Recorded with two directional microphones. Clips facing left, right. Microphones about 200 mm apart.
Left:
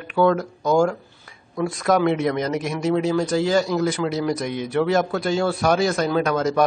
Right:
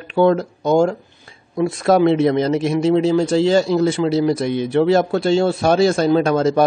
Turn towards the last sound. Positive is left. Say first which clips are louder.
# right 4 dB
turn(degrees=-30)  # may be behind; listen again after turning